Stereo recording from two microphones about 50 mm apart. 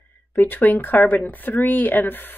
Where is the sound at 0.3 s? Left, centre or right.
Left.